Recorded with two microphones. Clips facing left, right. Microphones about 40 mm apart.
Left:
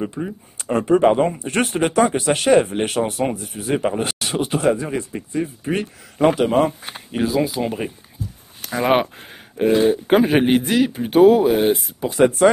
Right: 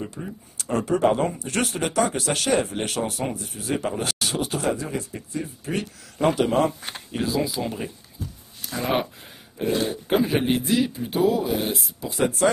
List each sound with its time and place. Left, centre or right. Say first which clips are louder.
0.0 s speech: left 7 dB; left
8.6 s speech: left 7 dB; left